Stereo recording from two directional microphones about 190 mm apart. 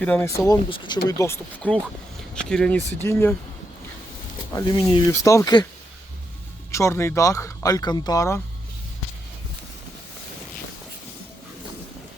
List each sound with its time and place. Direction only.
0.0 s speech: 10° left (ahead or behind)
4.5 s speech: 25° left (ahead or behind)
6.7 s speech: 15° left (ahead or behind)